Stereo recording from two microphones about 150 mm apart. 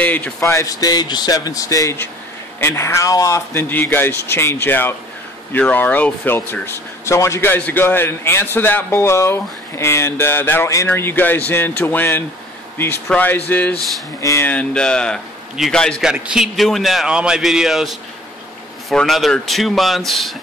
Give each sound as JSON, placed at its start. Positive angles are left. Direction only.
{"t": 0.0, "sound": "a man's voice", "side_deg": 10}
{"t": 16.1, "sound": "a man's voice", "side_deg": -5}